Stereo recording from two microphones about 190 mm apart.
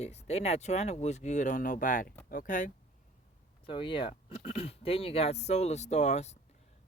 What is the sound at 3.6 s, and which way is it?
Speech, 25° left (ahead or behind).